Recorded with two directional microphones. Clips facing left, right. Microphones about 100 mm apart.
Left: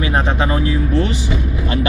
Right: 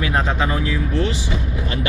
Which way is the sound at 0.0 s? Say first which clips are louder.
Left 2 dB; 25° left (ahead or behind).